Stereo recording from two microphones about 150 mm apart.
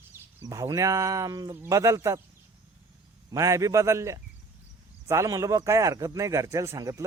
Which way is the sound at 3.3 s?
20° right (ahead or behind).